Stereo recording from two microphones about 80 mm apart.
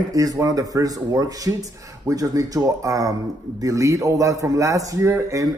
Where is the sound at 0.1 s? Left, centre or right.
Right.